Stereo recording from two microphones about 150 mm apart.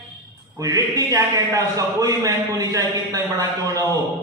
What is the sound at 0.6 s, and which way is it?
A man's voice, 25° right (ahead or behind).